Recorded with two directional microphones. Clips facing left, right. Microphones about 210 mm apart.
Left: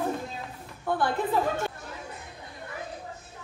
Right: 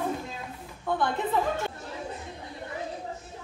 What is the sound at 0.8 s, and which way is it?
Speech, 5° left (ahead or behind).